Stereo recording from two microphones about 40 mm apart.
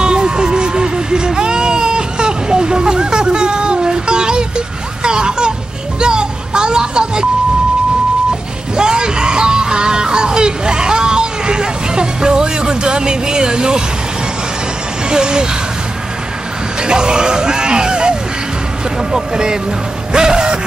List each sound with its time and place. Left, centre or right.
0.0 s a sound: centre
5.9 s music: right
8.7 s music: centre
15.0 s speech: right
16.8 s speech: right
19.1 s speech: centre
20.1 s music: centre